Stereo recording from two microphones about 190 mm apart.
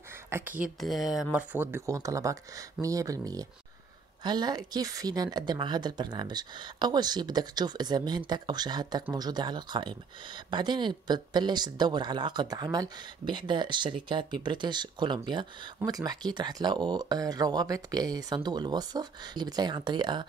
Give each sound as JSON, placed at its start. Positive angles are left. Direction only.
{"t": 0.3, "sound": "speech", "side_deg": -15}
{"t": 0.7, "sound": "speech", "side_deg": 0}